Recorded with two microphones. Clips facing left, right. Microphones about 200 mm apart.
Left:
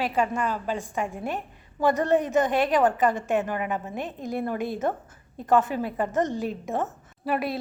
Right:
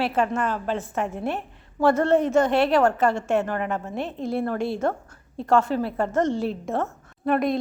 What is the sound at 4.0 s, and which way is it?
A woman's voice, 15° left (ahead or behind).